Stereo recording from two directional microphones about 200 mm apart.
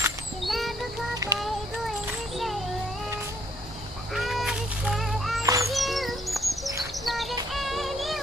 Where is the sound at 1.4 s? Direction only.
Centre (ahead or behind).